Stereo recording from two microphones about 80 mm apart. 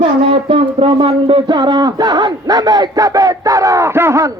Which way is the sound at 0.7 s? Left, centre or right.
Right.